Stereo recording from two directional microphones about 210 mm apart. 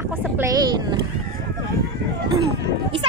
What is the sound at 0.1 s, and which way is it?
Boat, 15° right (ahead or behind).